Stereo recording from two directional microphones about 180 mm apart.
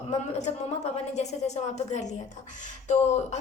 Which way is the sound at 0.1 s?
40° left (ahead or behind).